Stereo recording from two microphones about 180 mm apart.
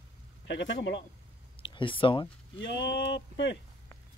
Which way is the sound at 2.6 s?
80° left.